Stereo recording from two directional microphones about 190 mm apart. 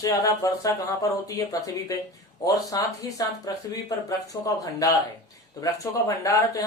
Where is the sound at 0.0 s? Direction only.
20° left (ahead or behind).